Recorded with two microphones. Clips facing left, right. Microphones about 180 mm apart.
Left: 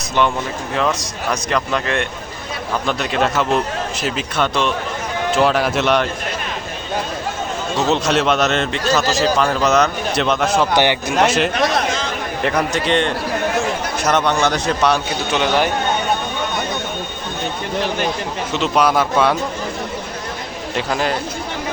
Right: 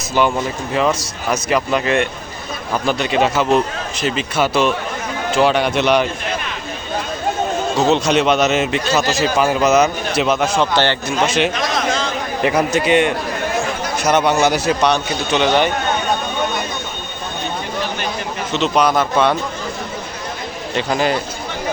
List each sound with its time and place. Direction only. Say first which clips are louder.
0.7 s a man's voice: right 2 dB; 5° right (ahead or behind)
7.9 s a man's voice: right 1 dB; centre (ahead or behind)
11.5 s a man's voice: left 3 dB; 60° left (ahead or behind)
12.4 s a man's voice: right 3 dB; 5° right (ahead or behind)
18.5 s a man's voice: right 1 dB; 5° left (ahead or behind)
20.7 s a man's voice: right 2 dB; centre (ahead or behind)